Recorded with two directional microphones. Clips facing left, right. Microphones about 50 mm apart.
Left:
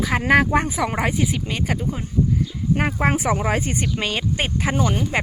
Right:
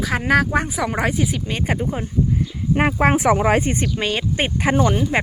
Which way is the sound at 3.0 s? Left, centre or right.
Right.